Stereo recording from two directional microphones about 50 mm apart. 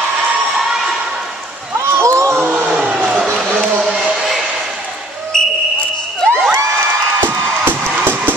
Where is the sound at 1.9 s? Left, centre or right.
Right.